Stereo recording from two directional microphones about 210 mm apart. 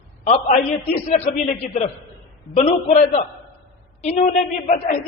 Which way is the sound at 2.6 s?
30° left (ahead or behind).